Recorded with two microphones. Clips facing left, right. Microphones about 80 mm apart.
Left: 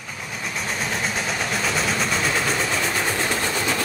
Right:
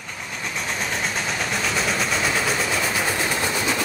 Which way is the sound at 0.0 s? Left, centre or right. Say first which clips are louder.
Even; centre.